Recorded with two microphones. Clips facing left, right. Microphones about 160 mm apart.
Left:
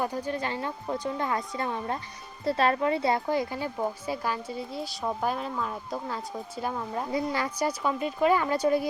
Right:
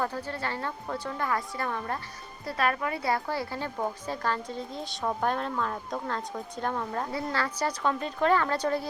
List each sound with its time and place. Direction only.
0.0 s speech: 15° left (ahead or behind)